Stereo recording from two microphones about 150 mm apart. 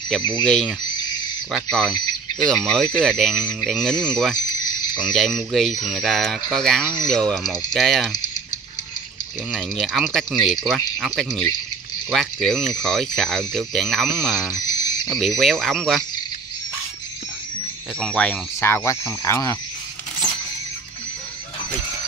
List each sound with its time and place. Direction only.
0.3 s speech: 5° left (ahead or behind)
4.4 s cricket: 25° left (ahead or behind)
5.1 s speech: centre (ahead or behind)
9.5 s speech: centre (ahead or behind)
14.6 s cricket: 25° left (ahead or behind)
15.0 s speech: centre (ahead or behind)
17.9 s speech: 5° left (ahead or behind); by 19.5 s 20° left (ahead or behind)